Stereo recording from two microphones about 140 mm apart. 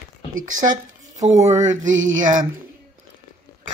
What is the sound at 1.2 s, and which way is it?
Speech, 55° right (ahead or behind).